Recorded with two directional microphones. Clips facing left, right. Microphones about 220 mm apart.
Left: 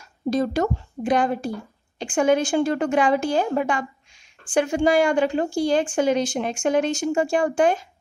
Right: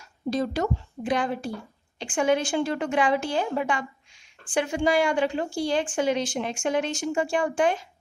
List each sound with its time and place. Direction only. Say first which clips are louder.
0.3 s a woman's voice: left 4 dB; 45° left (ahead or behind)